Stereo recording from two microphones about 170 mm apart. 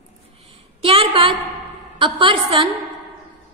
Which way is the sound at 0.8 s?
35° right (ahead or behind).